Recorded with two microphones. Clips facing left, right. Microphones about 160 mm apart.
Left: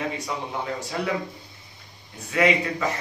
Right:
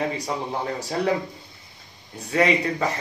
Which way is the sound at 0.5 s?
35° right (ahead or behind).